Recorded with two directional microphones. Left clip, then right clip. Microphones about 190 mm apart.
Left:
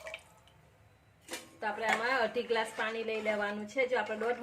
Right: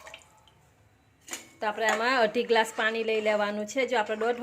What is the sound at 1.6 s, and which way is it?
Speech, 55° right (ahead or behind).